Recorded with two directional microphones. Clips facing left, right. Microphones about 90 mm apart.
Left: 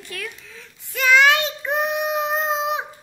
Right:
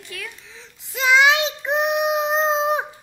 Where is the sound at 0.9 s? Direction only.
20° right (ahead or behind).